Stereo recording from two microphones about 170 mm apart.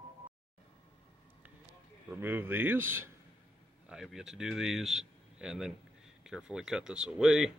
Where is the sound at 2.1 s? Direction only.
10° right (ahead or behind).